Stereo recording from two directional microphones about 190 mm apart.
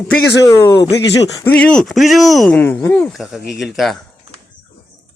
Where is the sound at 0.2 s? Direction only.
65° left (ahead or behind).